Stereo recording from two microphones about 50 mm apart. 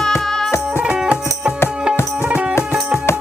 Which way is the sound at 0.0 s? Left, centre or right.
Centre.